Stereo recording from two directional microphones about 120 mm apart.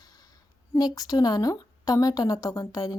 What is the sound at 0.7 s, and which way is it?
Speech, 30° left (ahead or behind).